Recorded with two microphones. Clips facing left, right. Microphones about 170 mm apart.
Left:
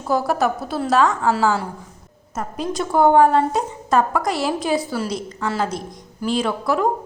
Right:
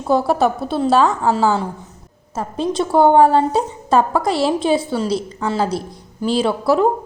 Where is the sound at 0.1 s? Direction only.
30° right (ahead or behind).